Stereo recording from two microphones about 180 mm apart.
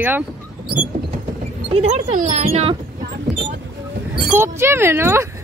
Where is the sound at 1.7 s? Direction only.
40° right (ahead or behind).